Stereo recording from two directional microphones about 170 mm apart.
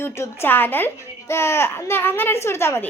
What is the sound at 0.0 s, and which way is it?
A woman's voice, 15° left (ahead or behind).